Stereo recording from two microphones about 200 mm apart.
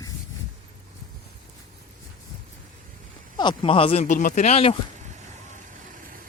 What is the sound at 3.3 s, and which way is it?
Speech, 25° left (ahead or behind).